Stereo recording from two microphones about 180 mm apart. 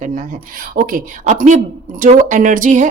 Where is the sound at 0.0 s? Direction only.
45° right (ahead or behind).